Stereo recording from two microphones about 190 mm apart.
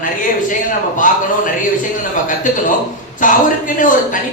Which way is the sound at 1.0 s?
45° left (ahead or behind).